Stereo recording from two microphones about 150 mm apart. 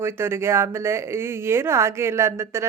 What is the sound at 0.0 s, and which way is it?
Speech, 15° right (ahead or behind).